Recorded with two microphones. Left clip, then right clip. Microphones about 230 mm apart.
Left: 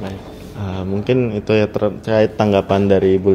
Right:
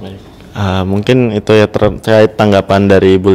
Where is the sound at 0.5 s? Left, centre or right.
Right.